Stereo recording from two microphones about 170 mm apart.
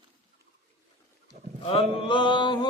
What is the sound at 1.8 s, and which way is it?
Mantra, 40° right (ahead or behind).